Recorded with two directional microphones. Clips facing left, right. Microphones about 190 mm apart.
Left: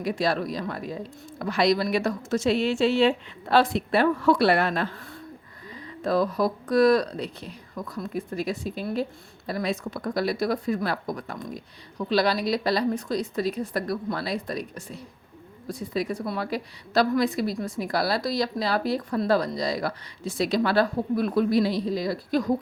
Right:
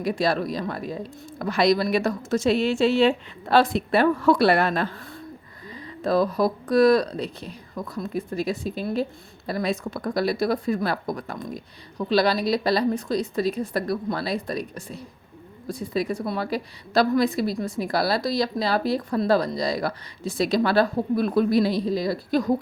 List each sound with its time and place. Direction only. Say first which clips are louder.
0.0 s a woman's voice: right 2 dB; 40° right (ahead or behind)
16.5 s speech: right 2 dB; 35° right (ahead or behind)